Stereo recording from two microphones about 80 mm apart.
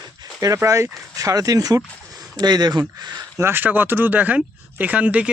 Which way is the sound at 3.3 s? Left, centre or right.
Right.